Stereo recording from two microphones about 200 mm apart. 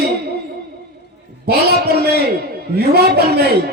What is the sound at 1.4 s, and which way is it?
Speech, 50° right (ahead or behind).